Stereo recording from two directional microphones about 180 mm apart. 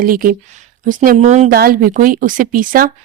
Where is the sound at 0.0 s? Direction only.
50° right (ahead or behind).